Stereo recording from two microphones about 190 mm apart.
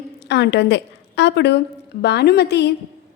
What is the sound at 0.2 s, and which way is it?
A woman's voice, 60° left (ahead or behind).